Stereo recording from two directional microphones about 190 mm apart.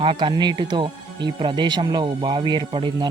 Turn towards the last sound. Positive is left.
turn(degrees=-25)  # may be behind; listen again after turning